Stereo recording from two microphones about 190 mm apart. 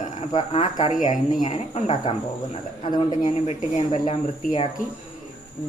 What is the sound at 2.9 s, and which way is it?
Speech, 25° left (ahead or behind).